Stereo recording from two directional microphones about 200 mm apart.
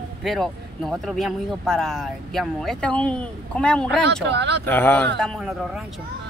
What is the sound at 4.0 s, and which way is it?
Speech, 60° right (ahead or behind).